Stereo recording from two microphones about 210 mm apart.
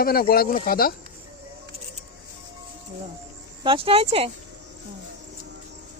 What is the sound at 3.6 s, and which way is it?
Speech, 25° right (ahead or behind).